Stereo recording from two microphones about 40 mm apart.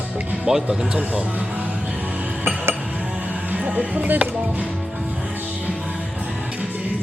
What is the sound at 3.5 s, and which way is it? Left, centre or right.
Speech, right.